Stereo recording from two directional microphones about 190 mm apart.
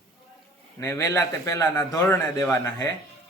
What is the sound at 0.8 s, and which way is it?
A man's voice, 15° left (ahead or behind).